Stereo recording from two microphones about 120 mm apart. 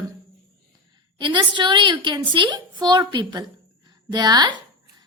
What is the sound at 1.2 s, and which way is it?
A woman's voice, 40° right (ahead or behind).